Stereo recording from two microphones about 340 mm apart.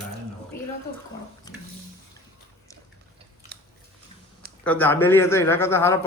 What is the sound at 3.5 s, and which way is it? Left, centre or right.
Biting, right.